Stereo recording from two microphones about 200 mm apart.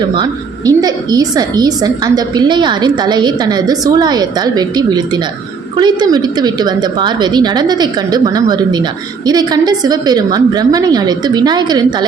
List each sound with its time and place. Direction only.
0.1 s a woman's voice: 20° right (ahead or behind)